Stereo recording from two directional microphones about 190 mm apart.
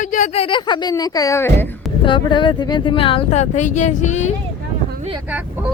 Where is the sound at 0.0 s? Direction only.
40° left (ahead or behind).